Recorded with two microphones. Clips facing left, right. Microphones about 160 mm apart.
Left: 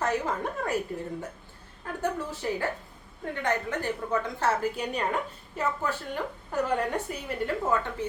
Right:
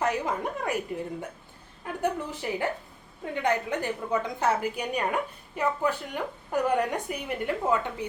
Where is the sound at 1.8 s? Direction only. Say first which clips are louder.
Right 1 dB; 15° right (ahead or behind).